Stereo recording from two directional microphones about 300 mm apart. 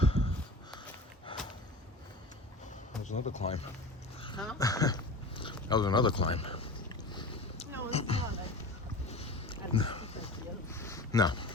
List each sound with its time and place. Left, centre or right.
0.0 s crow: centre
1.3 s a sound: centre
3.0 s speech: left
4.4 s speech: centre
7.1 s boat: centre
7.9 s a sound: centre